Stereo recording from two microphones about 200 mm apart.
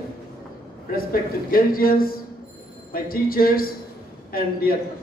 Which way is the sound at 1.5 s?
45° left (ahead or behind).